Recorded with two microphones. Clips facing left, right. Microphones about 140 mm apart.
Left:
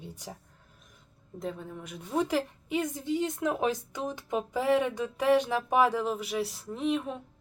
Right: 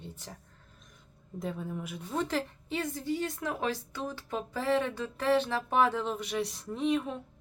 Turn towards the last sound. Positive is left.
turn(degrees=0)  # may be behind; listen again after turning